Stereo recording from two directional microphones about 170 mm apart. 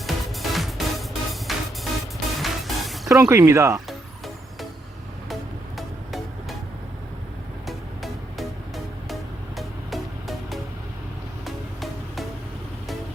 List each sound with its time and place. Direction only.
0.0 s music: centre (ahead or behind)
3.1 s speech: 15° right (ahead or behind)
5.3 s music: centre (ahead or behind)
7.7 s music: centre (ahead or behind)